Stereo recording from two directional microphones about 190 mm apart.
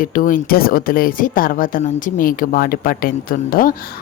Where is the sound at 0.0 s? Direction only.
45° left (ahead or behind).